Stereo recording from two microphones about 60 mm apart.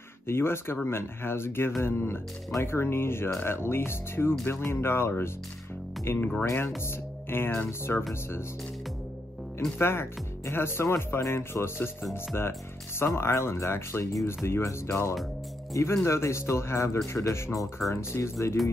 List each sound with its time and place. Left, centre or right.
0.3 s speech: left
9.8 s speech: left
17.6 s speech: centre
17.9 s speech: left